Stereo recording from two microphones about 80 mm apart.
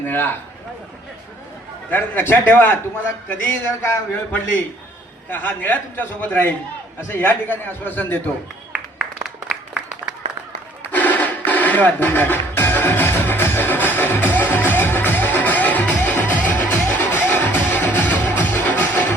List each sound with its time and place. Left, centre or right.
0.1 s a man's voice: left
1.9 s a man's voice: left
9.2 s applause: centre
10.8 s music: left